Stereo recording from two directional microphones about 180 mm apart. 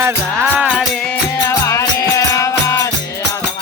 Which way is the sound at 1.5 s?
15° left (ahead or behind).